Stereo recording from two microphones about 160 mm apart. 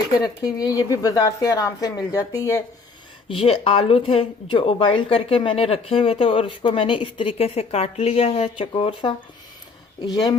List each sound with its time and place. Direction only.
0.2 s a woman's voice: 20° left (ahead or behind)
3.2 s a woman's voice: 35° left (ahead or behind)